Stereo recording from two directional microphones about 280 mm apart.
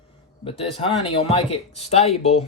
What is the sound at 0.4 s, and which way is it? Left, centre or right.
A man's voice, centre.